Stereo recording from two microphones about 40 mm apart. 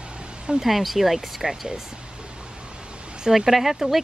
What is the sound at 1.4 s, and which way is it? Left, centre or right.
Speech, centre.